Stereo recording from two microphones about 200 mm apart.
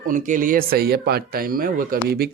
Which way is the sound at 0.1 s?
40° right (ahead or behind).